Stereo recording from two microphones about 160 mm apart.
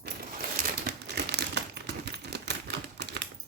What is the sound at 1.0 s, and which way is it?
Crumpling, 90° right.